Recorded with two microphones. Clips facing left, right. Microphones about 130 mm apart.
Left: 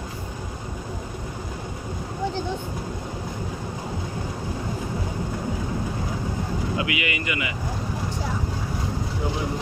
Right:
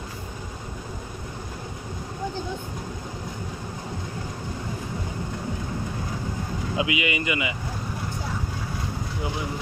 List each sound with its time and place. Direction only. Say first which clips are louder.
6.8 s speech: right 2 dB; 20° right (ahead or behind)